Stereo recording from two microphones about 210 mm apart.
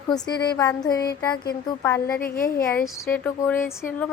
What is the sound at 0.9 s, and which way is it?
Speech, 50° left (ahead or behind).